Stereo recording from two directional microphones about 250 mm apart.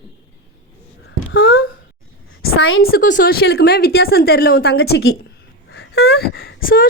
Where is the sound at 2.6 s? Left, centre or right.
Left.